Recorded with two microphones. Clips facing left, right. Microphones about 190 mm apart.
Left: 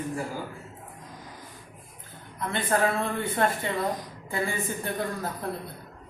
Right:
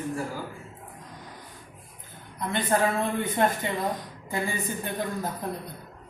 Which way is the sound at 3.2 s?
20° right (ahead or behind).